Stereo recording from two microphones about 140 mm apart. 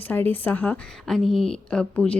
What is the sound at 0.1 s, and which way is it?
A woman's voice, 15° left (ahead or behind).